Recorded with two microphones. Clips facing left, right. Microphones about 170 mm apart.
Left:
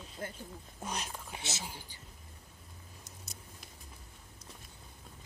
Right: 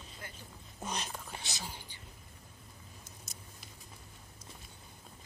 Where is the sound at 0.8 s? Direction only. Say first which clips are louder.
Even; 10° left (ahead or behind).